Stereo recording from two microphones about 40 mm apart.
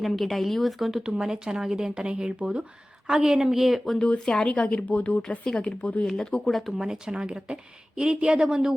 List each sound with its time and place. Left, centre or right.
0.0 s speech: centre
1.0 s speech: centre
3.1 s speech: centre
3.9 s speech: left
5.5 s speech: left
6.5 s speech: centre
6.7 s a woman's voice: centre